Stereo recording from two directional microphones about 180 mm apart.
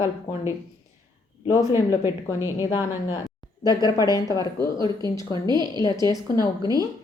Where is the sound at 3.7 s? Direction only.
20° left (ahead or behind).